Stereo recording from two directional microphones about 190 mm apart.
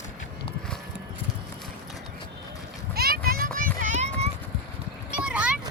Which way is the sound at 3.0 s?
50° right (ahead or behind).